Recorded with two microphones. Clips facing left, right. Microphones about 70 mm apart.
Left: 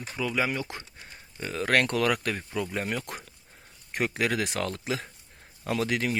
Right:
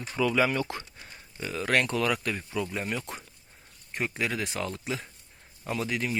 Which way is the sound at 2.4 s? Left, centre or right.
Left.